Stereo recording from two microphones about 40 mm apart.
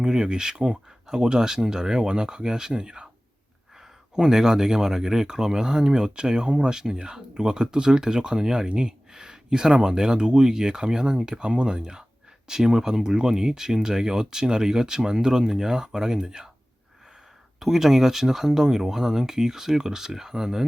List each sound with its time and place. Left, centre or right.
0.0 s speech: centre
17.6 s speech: centre